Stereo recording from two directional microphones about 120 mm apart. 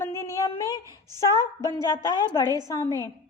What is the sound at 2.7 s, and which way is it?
Speech, 30° left (ahead or behind).